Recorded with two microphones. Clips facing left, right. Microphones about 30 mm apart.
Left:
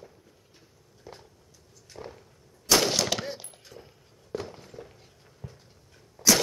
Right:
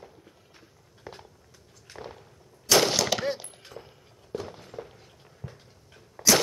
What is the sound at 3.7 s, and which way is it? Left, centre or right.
Walk, right.